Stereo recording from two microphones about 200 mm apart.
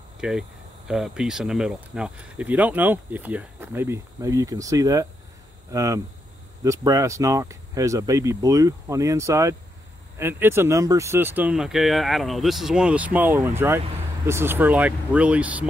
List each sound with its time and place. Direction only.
0.2 s speech: 5° right (ahead or behind)